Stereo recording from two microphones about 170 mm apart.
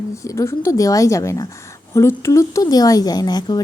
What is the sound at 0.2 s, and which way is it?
A woman's voice, 15° left (ahead or behind).